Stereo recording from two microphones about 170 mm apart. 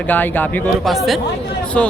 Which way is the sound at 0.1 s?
10° left (ahead or behind).